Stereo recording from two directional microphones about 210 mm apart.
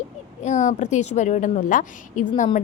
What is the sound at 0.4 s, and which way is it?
A woman's voice, 35° left (ahead or behind).